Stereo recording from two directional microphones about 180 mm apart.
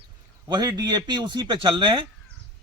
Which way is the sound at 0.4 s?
25° right (ahead or behind).